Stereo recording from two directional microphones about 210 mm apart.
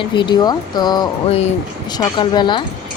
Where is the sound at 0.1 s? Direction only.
20° left (ahead or behind).